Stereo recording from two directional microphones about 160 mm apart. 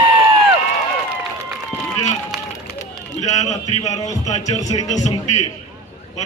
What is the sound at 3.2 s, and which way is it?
A man's voice, 45° left (ahead or behind).